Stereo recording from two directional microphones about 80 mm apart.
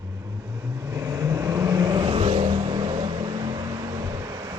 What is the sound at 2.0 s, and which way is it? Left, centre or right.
Vehicle, right.